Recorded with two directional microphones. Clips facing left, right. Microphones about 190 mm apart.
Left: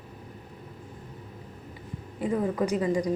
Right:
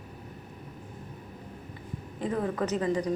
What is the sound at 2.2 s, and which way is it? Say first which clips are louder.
Speech: left 3 dB; 10° left (ahead or behind).